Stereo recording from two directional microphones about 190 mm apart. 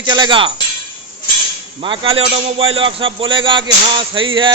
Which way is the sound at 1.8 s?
30° right (ahead or behind).